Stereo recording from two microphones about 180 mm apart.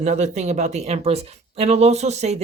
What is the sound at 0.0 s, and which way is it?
Speech, 40° right (ahead or behind).